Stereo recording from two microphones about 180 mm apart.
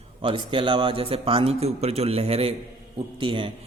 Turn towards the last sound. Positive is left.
turn(degrees=-30)  # may be behind; listen again after turning